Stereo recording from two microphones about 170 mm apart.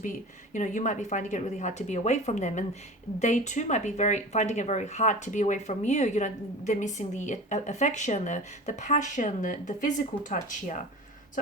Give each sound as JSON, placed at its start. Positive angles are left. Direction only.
{"t": 0.5, "sound": "speech", "side_deg": 45}